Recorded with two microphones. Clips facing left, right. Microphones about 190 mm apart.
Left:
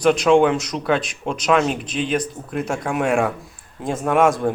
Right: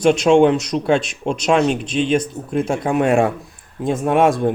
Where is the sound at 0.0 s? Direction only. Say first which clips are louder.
Right 2 dB; 25° right (ahead or behind).